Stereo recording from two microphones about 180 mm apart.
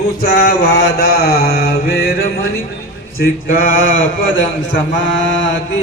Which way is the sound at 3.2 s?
50° left (ahead or behind).